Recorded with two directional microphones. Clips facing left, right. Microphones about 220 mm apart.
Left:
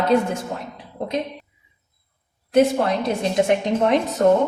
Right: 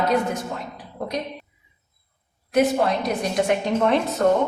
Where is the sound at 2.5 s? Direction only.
25° left (ahead or behind).